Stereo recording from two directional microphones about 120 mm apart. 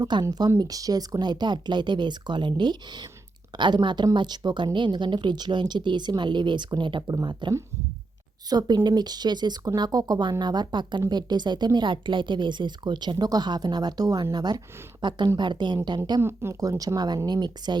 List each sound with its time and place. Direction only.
0.0 s speech: 35° right (ahead or behind)
16.2 s speech: 20° right (ahead or behind)